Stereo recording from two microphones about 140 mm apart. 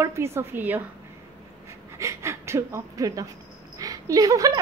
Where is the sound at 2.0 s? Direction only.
20° right (ahead or behind).